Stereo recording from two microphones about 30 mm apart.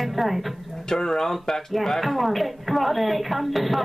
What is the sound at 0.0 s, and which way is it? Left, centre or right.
Speech, centre.